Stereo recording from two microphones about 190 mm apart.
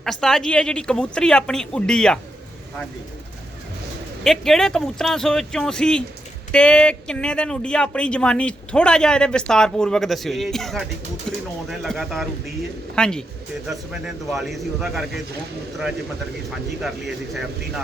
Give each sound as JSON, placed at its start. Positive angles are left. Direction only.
{"t": 0.0, "sound": "speech", "side_deg": 0}
{"t": 4.2, "sound": "speech", "side_deg": 0}